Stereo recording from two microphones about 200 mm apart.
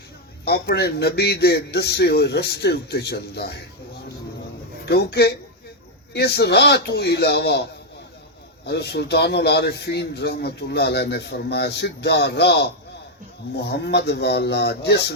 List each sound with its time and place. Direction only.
0.4 s a man's voice: 55° left (ahead or behind)
4.9 s a man's voice: 55° left (ahead or behind)
8.6 s a man's voice: 55° left (ahead or behind)